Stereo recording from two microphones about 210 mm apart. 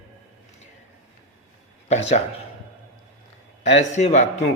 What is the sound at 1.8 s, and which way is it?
Speech, 30° left (ahead or behind).